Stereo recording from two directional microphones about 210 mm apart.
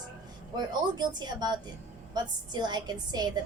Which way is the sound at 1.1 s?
20° right (ahead or behind).